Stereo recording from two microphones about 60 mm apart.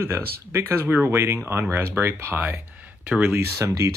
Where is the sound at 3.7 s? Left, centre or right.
Right.